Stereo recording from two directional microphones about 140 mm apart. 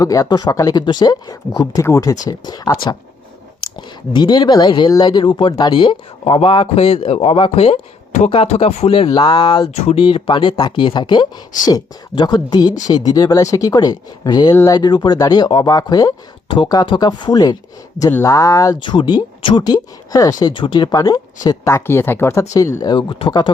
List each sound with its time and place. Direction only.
0.0 s speech: 25° left (ahead or behind)
3.8 s speech: 35° left (ahead or behind)
18.8 s speech: 35° left (ahead or behind)